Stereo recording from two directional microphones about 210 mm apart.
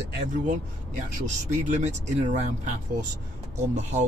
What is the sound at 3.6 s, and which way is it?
Speech, 35° right (ahead or behind).